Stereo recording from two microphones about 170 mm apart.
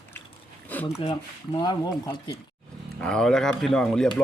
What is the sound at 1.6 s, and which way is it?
Speech, 25° left (ahead or behind).